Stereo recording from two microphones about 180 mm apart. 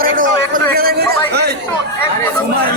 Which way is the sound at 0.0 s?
50° right (ahead or behind).